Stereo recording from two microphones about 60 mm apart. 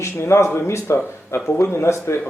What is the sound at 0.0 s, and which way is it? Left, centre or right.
Speech, left.